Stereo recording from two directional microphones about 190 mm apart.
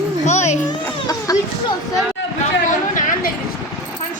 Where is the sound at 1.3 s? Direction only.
20° left (ahead or behind).